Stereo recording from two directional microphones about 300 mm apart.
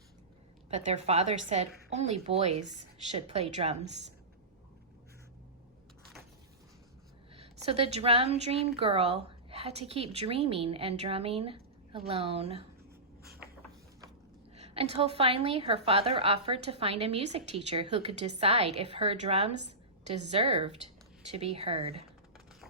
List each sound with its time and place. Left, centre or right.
0.7 s a woman's voice: right
7.3 s a woman's voice: centre
14.5 s a woman's voice: centre